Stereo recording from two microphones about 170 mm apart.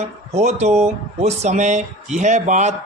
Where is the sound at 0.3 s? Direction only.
40° right (ahead or behind).